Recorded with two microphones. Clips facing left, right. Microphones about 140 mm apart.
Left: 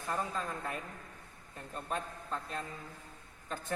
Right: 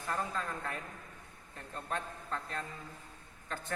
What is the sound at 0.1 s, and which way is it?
A man's voice, 10° left (ahead or behind).